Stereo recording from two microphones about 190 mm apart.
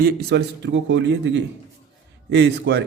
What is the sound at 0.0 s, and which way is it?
A man's voice, 60° right (ahead or behind).